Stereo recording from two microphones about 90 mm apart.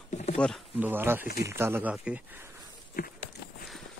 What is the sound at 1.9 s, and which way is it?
Speech, 15° right (ahead or behind).